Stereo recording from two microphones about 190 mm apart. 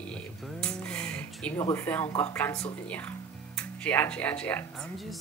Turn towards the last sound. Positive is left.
turn(degrees=10)  # may be behind; listen again after turning